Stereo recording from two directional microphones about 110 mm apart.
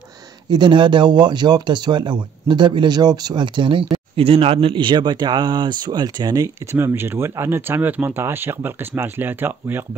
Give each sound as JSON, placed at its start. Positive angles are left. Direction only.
{"t": 0.5, "sound": "speech", "side_deg": -45}